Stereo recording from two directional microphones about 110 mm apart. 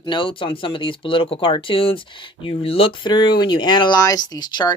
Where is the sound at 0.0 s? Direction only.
50° left (ahead or behind).